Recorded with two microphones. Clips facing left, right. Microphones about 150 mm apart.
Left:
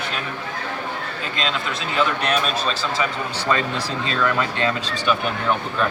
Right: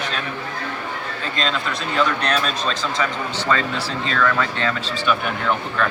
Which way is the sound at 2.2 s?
5° left (ahead or behind).